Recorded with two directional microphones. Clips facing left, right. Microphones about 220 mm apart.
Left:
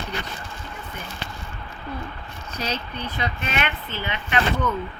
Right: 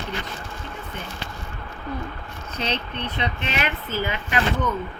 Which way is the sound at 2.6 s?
25° right (ahead or behind).